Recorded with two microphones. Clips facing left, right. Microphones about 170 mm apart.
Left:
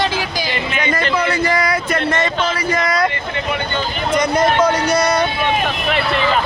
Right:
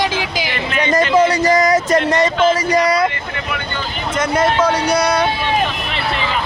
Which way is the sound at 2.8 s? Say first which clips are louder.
Right 2 dB; 30° right (ahead or behind).